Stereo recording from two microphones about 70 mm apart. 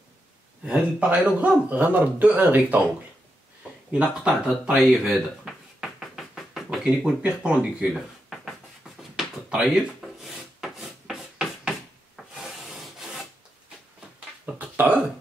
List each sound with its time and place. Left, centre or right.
0.7 s a man's voice: centre
4.0 s speech: centre
5.8 s knock: centre
6.8 s speech: centre
7.9 s a sound: centre
12.2 s rub: centre
14.4 s a sound: right